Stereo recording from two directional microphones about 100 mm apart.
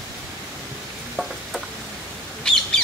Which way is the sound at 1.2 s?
5° left (ahead or behind).